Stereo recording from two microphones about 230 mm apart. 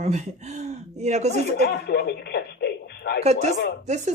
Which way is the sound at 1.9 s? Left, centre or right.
Left.